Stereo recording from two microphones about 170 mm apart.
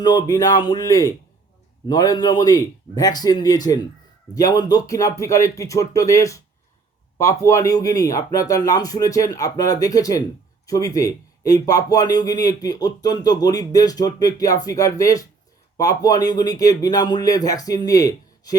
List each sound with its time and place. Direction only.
0.0 s a man's voice: 25° left (ahead or behind)